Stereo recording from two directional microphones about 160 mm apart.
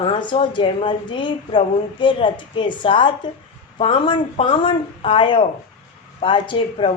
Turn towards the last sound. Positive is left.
turn(degrees=35)  # may be behind; listen again after turning